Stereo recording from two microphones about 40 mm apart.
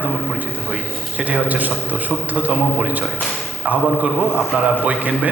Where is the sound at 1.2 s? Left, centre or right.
Right.